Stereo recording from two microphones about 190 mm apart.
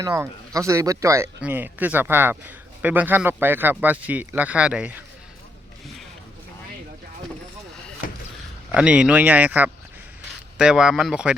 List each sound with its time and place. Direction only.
0.0 s speech: 15° right (ahead or behind)
8.0 s a sound: 45° left (ahead or behind)
8.7 s speech: 5° right (ahead or behind)